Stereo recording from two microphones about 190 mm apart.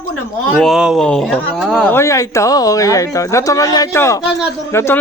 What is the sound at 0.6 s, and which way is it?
A man's voice, 5° right (ahead or behind).